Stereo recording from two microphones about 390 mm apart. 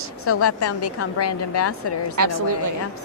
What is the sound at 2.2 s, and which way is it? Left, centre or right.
Speech, right.